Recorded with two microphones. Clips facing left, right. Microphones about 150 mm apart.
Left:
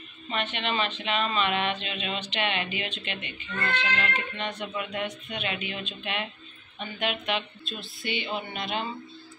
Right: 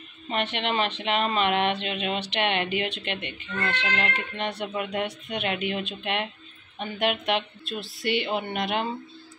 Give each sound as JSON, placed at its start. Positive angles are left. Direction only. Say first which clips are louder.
{"t": 0.3, "sound": "speech", "louder": "right 3 dB", "side_deg": -65}